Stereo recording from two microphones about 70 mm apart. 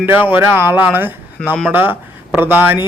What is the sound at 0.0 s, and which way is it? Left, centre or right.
Speech, right.